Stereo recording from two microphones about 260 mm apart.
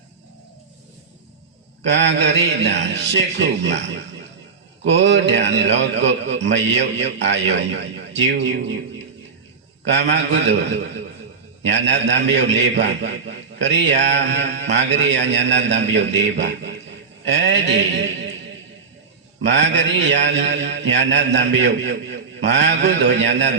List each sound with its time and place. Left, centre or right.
1.8 s a man's voice: right
9.8 s a man's voice: right
19.5 s a man's voice: right